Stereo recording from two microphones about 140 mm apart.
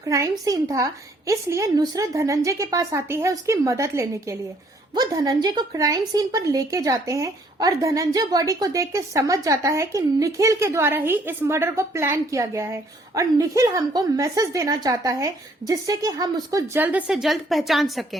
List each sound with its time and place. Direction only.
0.1 s speech: 25° right (ahead or behind)
17.1 s a woman's voice: centre (ahead or behind)